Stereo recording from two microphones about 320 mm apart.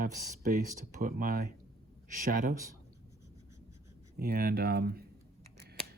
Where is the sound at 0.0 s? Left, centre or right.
Right.